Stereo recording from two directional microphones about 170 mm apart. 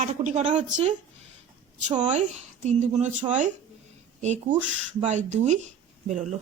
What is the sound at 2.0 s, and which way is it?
A woman's voice, 45° right (ahead or behind).